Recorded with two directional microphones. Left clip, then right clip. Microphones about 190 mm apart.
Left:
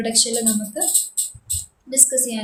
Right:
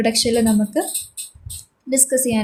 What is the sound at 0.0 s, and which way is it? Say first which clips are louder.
Speech: right 2 dB; 35° right (ahead or behind).